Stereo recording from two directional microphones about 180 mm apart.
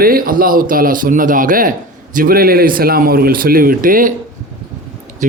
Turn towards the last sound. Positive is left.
turn(degrees=-45)  # may be behind; listen again after turning